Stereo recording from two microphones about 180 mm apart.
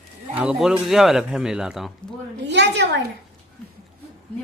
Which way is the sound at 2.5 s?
80° right.